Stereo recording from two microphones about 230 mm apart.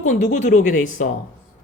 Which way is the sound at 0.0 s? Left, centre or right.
Left.